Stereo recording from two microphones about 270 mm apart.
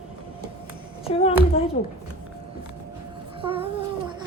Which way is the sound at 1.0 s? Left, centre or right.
Left.